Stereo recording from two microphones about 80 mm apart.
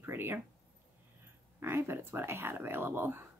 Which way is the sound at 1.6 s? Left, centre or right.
Right.